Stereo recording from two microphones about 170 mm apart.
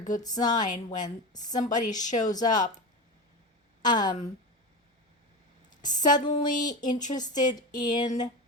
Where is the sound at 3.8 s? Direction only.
25° left (ahead or behind).